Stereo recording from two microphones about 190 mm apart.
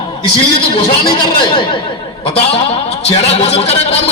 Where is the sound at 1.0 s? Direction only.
25° left (ahead or behind).